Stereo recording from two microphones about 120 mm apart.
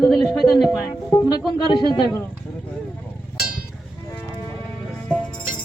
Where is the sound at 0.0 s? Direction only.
Centre (ahead or behind).